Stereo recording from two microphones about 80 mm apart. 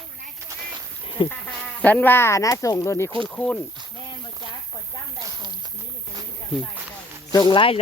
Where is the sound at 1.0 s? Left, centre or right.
Left.